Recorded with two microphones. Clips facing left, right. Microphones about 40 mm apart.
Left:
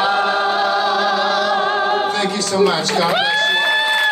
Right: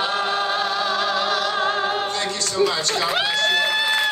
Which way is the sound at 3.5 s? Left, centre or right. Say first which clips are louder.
Left 4 dB; centre.